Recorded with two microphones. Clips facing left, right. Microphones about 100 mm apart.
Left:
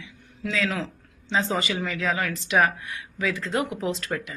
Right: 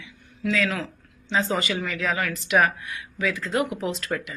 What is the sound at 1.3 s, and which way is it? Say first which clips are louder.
Speech: right 1 dB; 25° left (ahead or behind).